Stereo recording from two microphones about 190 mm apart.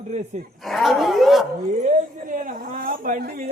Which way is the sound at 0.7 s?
Centre (ahead or behind).